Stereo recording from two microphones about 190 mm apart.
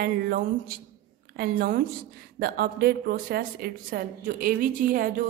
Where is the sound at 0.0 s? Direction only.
50° right (ahead or behind).